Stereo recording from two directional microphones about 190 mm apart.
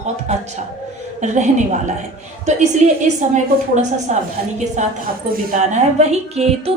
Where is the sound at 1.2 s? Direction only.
40° right (ahead or behind).